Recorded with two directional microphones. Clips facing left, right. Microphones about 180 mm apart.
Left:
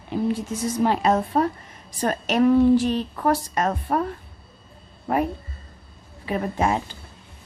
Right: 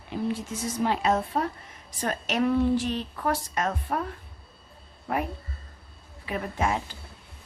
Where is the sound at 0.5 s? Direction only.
40° left (ahead or behind).